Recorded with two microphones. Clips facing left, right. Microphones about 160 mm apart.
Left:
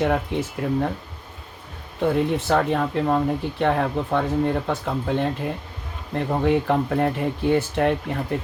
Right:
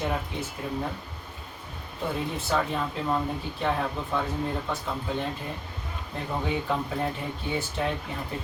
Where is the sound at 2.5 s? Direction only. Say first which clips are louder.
Left 7 dB; 60° left (ahead or behind).